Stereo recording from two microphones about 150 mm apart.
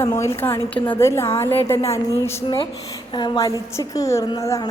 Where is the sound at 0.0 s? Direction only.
20° left (ahead or behind).